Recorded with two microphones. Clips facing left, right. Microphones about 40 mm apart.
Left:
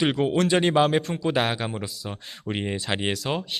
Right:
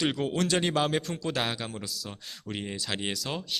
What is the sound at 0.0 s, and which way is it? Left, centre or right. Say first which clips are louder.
A man's voice: left 6 dB; centre.